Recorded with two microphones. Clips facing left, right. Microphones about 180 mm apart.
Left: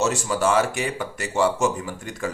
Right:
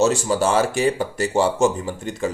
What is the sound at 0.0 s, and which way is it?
Speech, 30° right (ahead or behind).